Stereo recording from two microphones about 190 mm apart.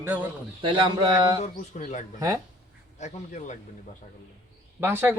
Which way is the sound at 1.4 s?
40° left (ahead or behind).